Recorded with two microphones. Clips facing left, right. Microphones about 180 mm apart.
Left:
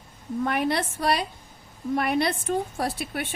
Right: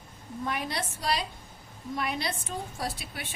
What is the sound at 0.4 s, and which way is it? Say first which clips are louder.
A woman's voice: left 7 dB; 60° left (ahead or behind).